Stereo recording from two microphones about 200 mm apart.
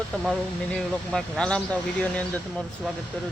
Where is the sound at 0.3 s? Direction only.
Centre (ahead or behind).